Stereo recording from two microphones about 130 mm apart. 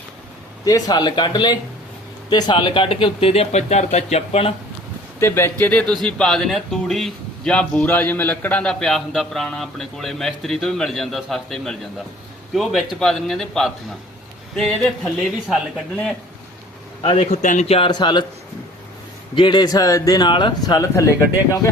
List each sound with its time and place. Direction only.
0.6 s speech: 30° left (ahead or behind); by 4.5 s 50° left (ahead or behind)
5.2 s speech: 20° left (ahead or behind)
17.2 s a man's voice: 65° left (ahead or behind)
17.7 s speech: 45° left (ahead or behind)
19.4 s speech: 35° left (ahead or behind)